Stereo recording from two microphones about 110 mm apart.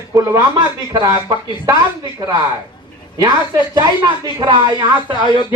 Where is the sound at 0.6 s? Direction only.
40° right (ahead or behind).